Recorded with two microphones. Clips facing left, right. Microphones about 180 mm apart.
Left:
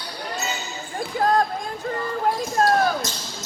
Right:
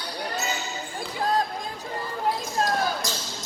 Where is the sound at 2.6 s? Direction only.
50° left (ahead or behind).